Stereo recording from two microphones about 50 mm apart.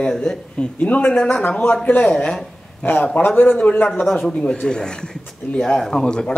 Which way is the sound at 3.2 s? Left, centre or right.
Left.